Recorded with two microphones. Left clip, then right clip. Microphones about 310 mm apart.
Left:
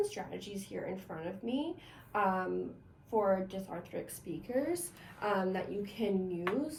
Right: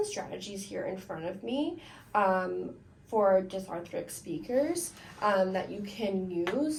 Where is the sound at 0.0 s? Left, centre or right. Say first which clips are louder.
Right 3 dB; centre.